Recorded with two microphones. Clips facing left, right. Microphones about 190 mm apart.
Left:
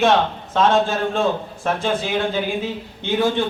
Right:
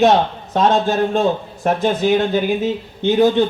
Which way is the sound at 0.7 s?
35° right (ahead or behind).